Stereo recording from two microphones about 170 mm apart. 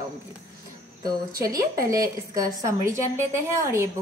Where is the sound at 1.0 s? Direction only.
25° right (ahead or behind).